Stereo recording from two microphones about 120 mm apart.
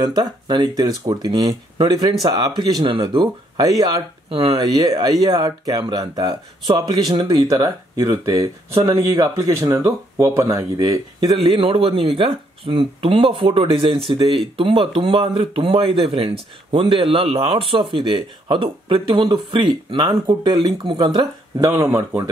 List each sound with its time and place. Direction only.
0.0 s speech: 35° right (ahead or behind)
11.3 s a man's voice: 50° right (ahead or behind)
21.5 s speech: 20° right (ahead or behind)